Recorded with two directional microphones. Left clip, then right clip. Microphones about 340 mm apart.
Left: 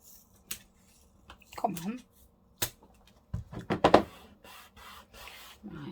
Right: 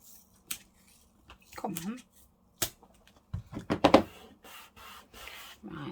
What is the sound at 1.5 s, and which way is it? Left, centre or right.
Speech, centre.